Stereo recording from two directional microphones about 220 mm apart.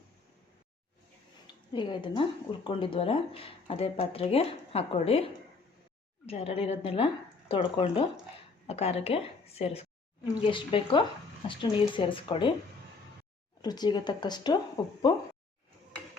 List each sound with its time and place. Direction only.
1.7 s speech: 20° left (ahead or behind)
13.6 s speech: 20° left (ahead or behind)